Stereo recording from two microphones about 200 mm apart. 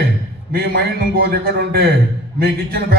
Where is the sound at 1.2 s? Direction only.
55° right (ahead or behind).